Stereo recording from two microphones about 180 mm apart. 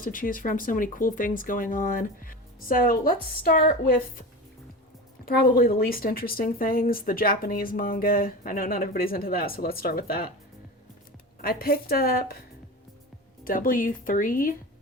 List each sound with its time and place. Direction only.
0.0 s speech: 50° left (ahead or behind)
5.2 s speech: 55° left (ahead or behind)
11.4 s speech: 55° left (ahead or behind)
13.4 s speech: 50° left (ahead or behind)